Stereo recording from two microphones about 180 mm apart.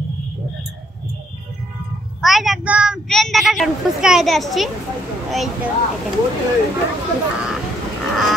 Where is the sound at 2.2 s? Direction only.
Centre (ahead or behind).